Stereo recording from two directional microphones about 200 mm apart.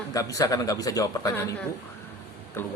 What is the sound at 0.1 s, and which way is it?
A woman's voice, 15° left (ahead or behind).